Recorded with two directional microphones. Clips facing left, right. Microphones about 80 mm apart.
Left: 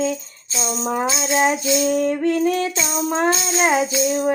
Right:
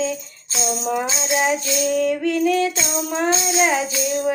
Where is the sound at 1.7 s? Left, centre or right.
Left.